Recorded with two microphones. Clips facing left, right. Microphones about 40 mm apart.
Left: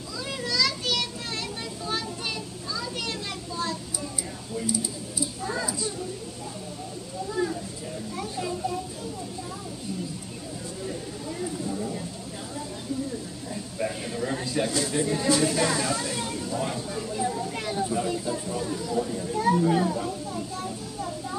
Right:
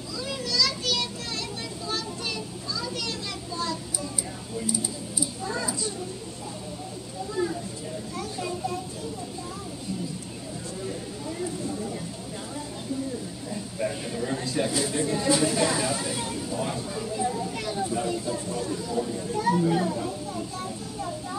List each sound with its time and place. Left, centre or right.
0.3 s children playing: centre
13.8 s a sound: centre
14.9 s speech: centre
15.2 s speech: centre
16.5 s vehicle: centre
17.9 s a sound: centre